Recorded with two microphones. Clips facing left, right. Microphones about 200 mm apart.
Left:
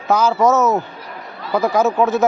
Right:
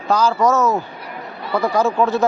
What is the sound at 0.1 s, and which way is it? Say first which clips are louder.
Speech: left 1 dB; 20° left (ahead or behind).